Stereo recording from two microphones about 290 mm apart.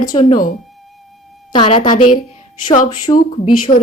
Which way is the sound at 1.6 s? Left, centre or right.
Centre.